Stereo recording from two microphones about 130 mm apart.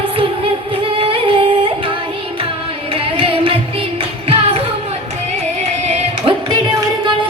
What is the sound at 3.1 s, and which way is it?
Music, 45° right (ahead or behind).